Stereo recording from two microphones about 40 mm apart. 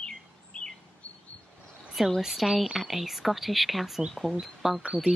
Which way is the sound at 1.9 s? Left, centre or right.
Centre.